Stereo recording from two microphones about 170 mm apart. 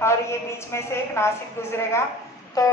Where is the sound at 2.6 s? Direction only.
20° left (ahead or behind).